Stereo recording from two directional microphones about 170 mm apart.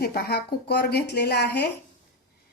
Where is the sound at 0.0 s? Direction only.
70° left (ahead or behind).